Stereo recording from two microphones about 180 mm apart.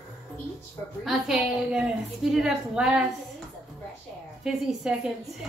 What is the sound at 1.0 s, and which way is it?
A woman's voice, centre (ahead or behind).